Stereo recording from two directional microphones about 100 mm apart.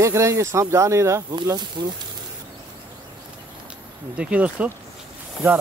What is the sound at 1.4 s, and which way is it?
Speech, 45° right (ahead or behind).